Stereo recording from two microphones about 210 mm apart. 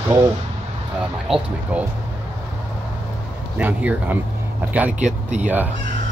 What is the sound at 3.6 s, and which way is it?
Speech, 5° right (ahead or behind).